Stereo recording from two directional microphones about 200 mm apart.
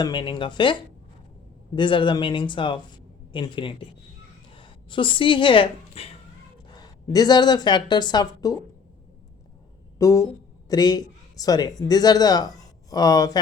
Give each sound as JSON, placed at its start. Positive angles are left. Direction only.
{"t": 0.0, "sound": "speech", "side_deg": 25}
{"t": 10.0, "sound": "a sound", "side_deg": 15}
{"t": 10.7, "sound": "speech", "side_deg": 20}